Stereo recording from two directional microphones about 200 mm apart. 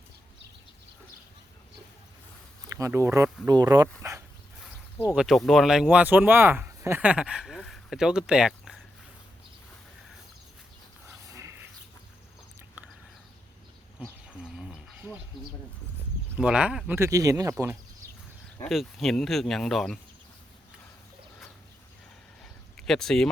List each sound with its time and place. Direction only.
2.6 s speech: 15° right (ahead or behind)
4.0 s dog: 15° right (ahead or behind)
5.1 s speech: centre (ahead or behind)
11.3 s a sound: 15° right (ahead or behind)
12.8 s a sound: 10° right (ahead or behind)
14.0 s bird: 5° right (ahead or behind)
16.4 s speech: 5° right (ahead or behind)
18.7 s speech: centre (ahead or behind)
22.8 s speech: centre (ahead or behind)